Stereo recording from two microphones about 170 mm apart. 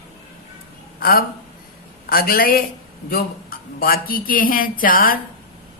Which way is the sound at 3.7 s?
60° left (ahead or behind).